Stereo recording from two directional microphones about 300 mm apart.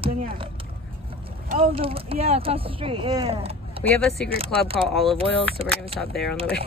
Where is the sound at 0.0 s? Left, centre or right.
Right.